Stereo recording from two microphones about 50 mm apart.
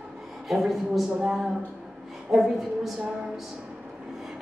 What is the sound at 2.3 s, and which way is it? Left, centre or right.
Speech, centre.